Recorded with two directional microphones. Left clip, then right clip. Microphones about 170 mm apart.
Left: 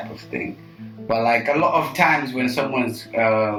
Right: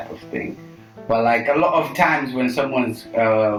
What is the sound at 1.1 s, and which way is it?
Speech, 20° left (ahead or behind).